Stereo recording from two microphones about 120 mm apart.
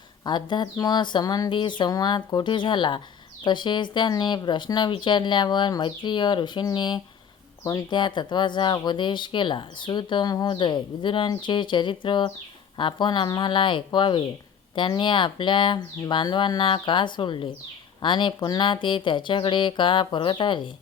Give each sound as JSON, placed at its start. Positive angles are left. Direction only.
{"t": 0.3, "sound": "speech", "side_deg": 40}